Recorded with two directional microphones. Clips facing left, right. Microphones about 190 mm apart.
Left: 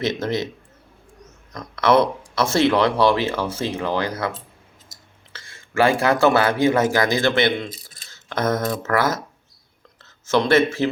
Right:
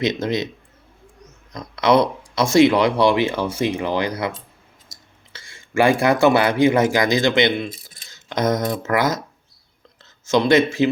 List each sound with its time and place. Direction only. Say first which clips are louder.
0.0 s speech: right 2 dB; 15° right (ahead or behind)
1.5 s speech: right 1 dB; 15° right (ahead or behind)
10.2 s speech: right 1 dB; 15° right (ahead or behind)